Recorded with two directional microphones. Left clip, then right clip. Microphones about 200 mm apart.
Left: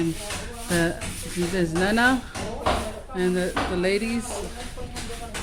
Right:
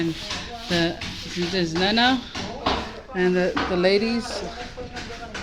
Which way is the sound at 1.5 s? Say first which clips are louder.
Right 1 dB; 15° left (ahead or behind).